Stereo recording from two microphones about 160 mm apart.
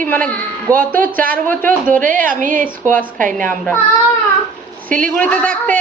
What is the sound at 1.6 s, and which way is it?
A woman's voice, 55° right (ahead or behind).